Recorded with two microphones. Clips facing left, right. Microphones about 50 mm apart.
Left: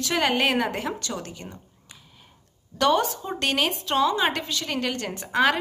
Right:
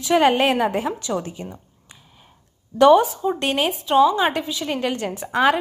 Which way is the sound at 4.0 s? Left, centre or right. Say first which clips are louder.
Right 6 dB; centre.